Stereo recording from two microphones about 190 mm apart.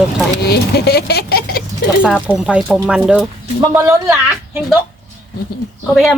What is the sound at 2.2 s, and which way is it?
Speech, 5° right (ahead or behind).